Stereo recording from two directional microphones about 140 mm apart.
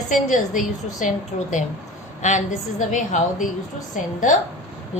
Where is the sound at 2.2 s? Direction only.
60° left (ahead or behind).